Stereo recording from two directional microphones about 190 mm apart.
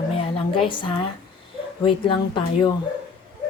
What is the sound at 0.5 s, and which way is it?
Speech, 25° left (ahead or behind).